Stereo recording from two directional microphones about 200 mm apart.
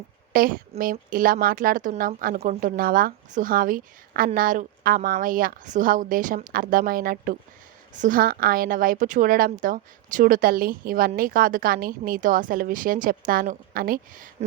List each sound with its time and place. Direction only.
0.3 s a woman's voice: 45° right (ahead or behind)